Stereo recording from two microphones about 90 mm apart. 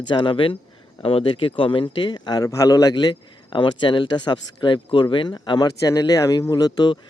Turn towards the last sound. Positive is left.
turn(degrees=55)  # may be behind; listen again after turning